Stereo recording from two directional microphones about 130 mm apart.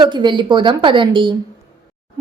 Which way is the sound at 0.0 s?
35° right (ahead or behind).